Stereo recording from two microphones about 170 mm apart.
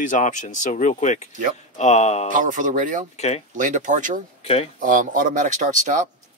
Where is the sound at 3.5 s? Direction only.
50° right (ahead or behind).